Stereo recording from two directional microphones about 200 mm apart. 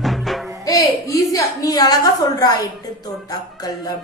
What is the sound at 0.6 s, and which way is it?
A child's voice, 15° left (ahead or behind).